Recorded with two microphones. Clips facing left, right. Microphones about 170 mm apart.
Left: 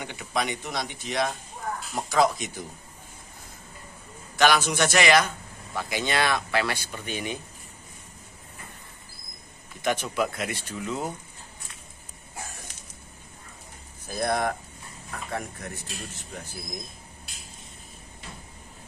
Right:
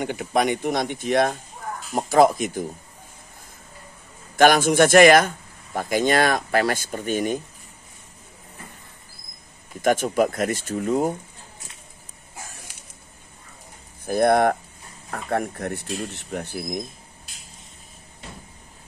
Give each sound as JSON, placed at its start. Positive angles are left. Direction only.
{"t": 0.0, "sound": "speech", "side_deg": -50}
{"t": 4.4, "sound": "speech", "side_deg": -50}
{"t": 9.8, "sound": "speech", "side_deg": -45}
{"t": 14.0, "sound": "speech", "side_deg": -60}